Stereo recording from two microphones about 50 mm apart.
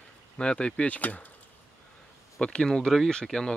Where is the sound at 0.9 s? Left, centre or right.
Left.